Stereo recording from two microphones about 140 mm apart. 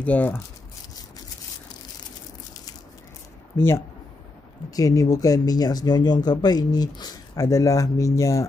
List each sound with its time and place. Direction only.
0.0 s speech: 10° left (ahead or behind)
3.5 s speech: 15° left (ahead or behind)